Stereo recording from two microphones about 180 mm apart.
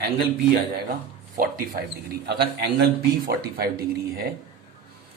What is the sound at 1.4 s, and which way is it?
Speech, 55° right (ahead or behind).